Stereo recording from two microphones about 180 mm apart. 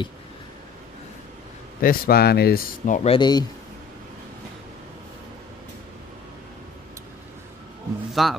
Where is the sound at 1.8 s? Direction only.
55° left (ahead or behind).